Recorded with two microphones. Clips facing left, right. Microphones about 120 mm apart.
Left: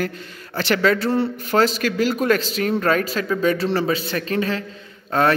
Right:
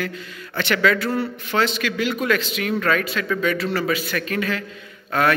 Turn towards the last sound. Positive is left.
turn(degrees=30)  # may be behind; listen again after turning